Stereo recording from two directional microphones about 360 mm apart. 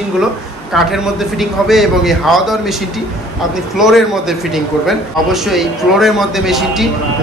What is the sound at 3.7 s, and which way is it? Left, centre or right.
A man's voice, centre.